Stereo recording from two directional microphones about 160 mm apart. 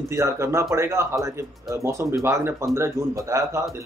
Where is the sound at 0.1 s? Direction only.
20° right (ahead or behind).